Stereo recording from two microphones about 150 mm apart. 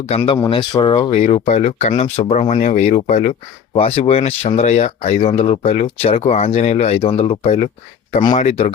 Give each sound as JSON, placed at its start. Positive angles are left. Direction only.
{"t": 0.5, "sound": "speech", "side_deg": 35}
{"t": 1.2, "sound": "speech", "side_deg": 50}